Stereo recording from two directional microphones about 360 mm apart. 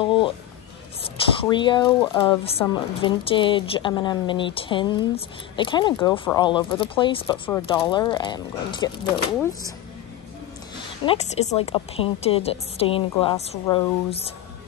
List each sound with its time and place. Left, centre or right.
0.0 s a sound: centre
1.0 s speech: centre
11.1 s speech: centre